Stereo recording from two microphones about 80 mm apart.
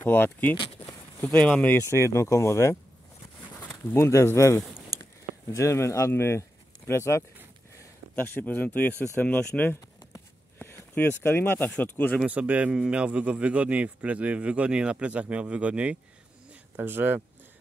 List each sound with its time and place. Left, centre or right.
0.0 s speech: left
0.8 s a sound: left
1.9 s speech: left
3.9 s speech: left
8.2 s speech: left
10.1 s a sound: left
11.7 s speech: left
12.3 s a man's voice: centre
16.7 s speech: right